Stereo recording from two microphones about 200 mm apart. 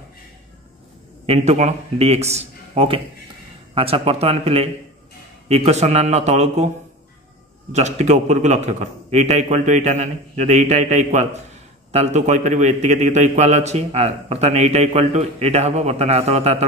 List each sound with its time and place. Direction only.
1.2 s a man's voice: 30° right (ahead or behind)
7.7 s a man's voice: 35° right (ahead or behind)